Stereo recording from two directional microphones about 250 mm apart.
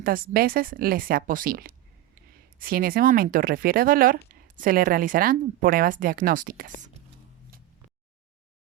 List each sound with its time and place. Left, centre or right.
0.0 s speech: right